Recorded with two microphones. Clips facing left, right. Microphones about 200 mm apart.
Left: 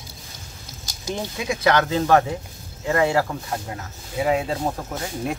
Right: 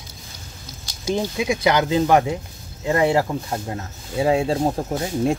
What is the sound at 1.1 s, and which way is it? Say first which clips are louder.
Speech: right 5 dB; 15° right (ahead or behind).